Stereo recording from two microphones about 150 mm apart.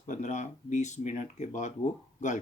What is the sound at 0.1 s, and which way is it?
Speech, 50° left (ahead or behind).